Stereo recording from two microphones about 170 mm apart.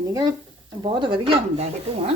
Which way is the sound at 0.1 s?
20° right (ahead or behind).